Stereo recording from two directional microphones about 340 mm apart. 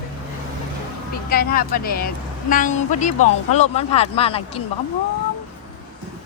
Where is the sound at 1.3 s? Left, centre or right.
Left.